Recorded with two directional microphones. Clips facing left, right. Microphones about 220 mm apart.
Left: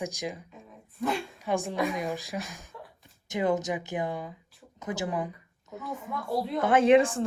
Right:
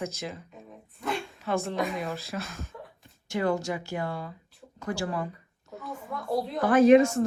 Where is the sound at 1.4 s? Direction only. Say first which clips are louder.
Even; 15° left (ahead or behind).